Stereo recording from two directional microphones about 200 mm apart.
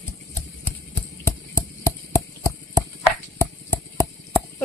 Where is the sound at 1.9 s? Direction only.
15° left (ahead or behind).